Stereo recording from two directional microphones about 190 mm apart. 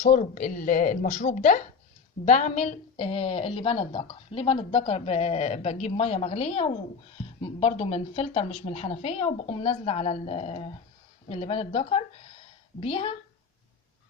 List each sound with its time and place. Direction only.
0.0 s a woman's voice: 45° left (ahead or behind); by 13.1 s 30° left (ahead or behind)